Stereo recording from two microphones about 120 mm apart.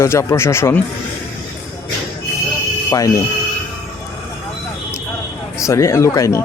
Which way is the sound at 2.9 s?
30° left (ahead or behind).